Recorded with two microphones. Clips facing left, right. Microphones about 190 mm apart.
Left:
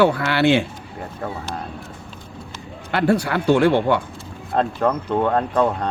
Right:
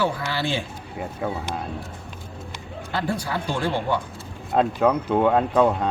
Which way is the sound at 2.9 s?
65° left (ahead or behind).